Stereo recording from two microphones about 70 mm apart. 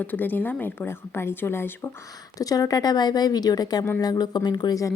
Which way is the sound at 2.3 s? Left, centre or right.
Left.